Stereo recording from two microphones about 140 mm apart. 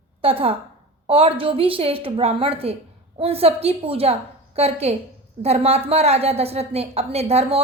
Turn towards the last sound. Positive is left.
turn(degrees=-45)  # may be behind; listen again after turning